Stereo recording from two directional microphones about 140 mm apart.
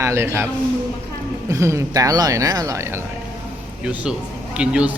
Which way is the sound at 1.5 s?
20° right (ahead or behind).